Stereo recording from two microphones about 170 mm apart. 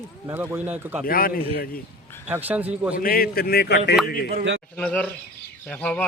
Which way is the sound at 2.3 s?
10° right (ahead or behind).